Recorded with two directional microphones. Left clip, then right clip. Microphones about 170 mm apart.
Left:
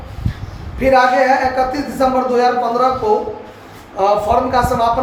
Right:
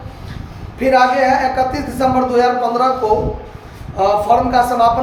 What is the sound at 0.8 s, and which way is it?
Speech, 25° right (ahead or behind).